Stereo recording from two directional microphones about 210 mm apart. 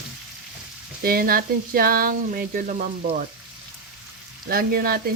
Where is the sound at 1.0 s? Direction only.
45° right (ahead or behind).